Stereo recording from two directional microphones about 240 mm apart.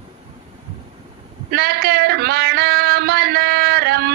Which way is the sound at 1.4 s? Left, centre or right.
Right.